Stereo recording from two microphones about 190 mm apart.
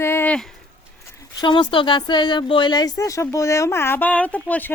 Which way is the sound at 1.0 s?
20° left (ahead or behind).